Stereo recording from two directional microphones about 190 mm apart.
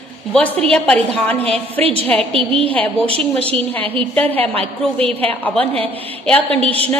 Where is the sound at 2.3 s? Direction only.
30° right (ahead or behind).